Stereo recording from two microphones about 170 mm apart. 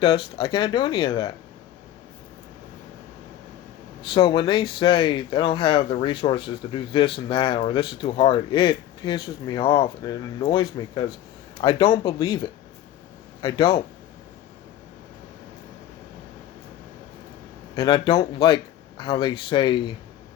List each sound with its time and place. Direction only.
0.0 s speech: 30° left (ahead or behind)
4.1 s speech: 30° left (ahead or behind)
17.7 s speech: 30° left (ahead or behind)